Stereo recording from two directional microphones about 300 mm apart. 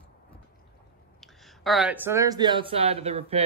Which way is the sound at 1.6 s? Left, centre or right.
Centre.